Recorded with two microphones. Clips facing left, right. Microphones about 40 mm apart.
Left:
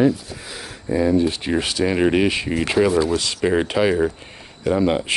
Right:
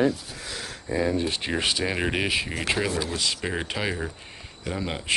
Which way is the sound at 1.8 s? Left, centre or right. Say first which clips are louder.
Left 9 dB; centre.